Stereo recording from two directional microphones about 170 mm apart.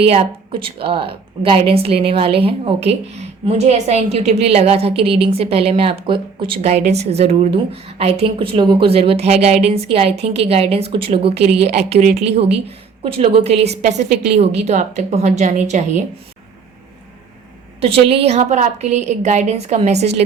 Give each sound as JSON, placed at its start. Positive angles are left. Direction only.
{"t": 0.0, "sound": "speech", "side_deg": -35}
{"t": 17.7, "sound": "speech", "side_deg": -35}